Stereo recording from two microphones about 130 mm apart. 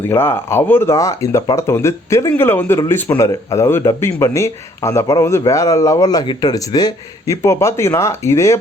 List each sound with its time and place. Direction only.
0.1 s speech: 20° left (ahead or behind)